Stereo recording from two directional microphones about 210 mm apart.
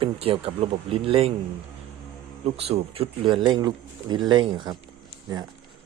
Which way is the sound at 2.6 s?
30° right (ahead or behind).